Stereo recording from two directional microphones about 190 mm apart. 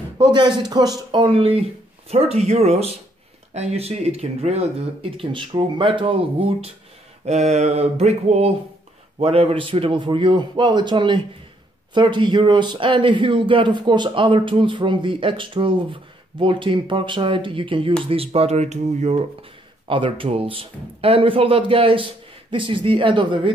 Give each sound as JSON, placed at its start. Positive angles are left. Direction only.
{"t": 0.2, "sound": "speech", "side_deg": -25}